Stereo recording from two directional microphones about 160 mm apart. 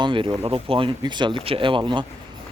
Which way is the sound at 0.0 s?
30° right (ahead or behind).